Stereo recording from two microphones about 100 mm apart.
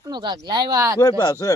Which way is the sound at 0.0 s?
45° right (ahead or behind).